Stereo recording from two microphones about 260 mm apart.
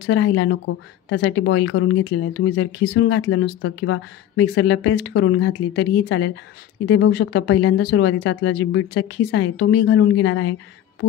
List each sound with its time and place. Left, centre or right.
0.0 s speech: left